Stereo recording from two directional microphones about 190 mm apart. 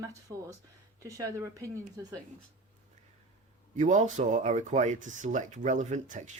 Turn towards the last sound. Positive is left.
turn(degrees=-40)  # may be behind; listen again after turning